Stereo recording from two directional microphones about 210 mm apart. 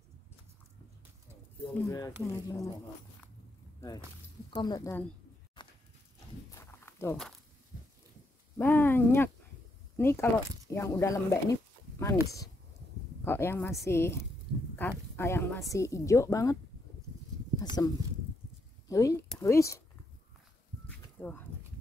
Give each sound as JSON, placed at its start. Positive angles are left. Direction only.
{"t": 1.7, "sound": "a woman's voice", "side_deg": 15}
{"t": 4.6, "sound": "speech", "side_deg": 20}
{"t": 5.6, "sound": "horse", "side_deg": 20}
{"t": 6.5, "sound": "a sound", "side_deg": 10}
{"t": 8.5, "sound": "a woman's voice", "side_deg": 10}
{"t": 17.6, "sound": "a woman's voice", "side_deg": 20}
{"t": 21.2, "sound": "speech", "side_deg": 10}